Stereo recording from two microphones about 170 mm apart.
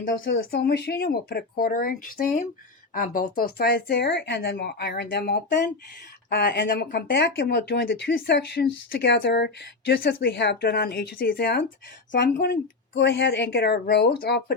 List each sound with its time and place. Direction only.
0.3 s speech: 70° left (ahead or behind)
6.3 s speech: 80° left; by 11.6 s 65° left (ahead or behind)
12.1 s speech: 80° left